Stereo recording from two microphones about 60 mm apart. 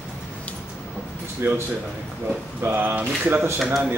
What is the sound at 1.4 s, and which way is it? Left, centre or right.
Speech, right.